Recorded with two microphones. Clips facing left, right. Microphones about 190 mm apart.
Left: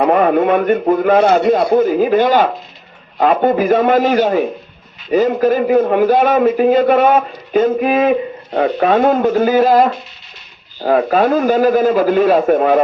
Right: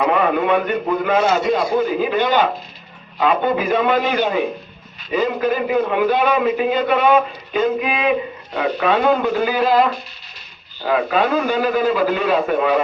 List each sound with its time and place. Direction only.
0.0 s a man's voice: 45° left (ahead or behind)